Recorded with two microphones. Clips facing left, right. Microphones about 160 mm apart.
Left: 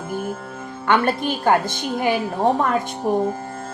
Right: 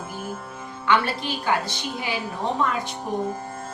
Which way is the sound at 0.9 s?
50° left (ahead or behind).